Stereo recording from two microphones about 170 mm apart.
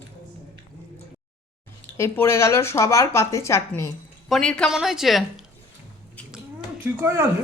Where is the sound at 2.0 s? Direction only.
15° left (ahead or behind).